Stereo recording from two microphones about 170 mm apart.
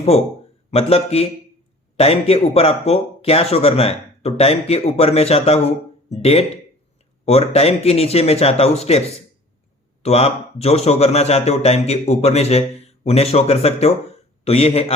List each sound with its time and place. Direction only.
0.7 s a man's voice: 35° left (ahead or behind)